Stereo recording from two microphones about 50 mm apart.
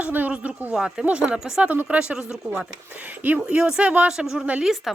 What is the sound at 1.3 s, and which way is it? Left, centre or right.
A woman's voice, centre.